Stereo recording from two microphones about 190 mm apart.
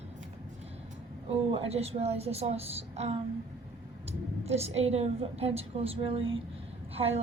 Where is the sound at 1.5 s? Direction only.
30° right (ahead or behind).